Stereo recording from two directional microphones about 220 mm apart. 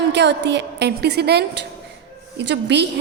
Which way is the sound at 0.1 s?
50° right (ahead or behind).